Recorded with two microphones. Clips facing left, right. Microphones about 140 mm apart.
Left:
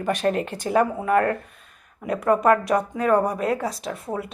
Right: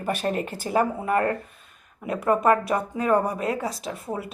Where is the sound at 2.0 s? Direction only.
5° right (ahead or behind).